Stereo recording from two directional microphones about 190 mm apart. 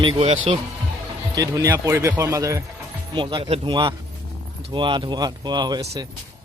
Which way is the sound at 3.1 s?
25° right (ahead or behind).